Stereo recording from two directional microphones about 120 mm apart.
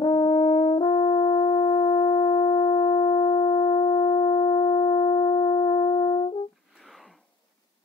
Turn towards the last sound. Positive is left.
turn(degrees=40)  # may be behind; listen again after turning